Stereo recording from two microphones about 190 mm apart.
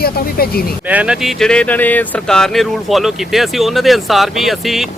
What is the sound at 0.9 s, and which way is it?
Speech, 5° right (ahead or behind).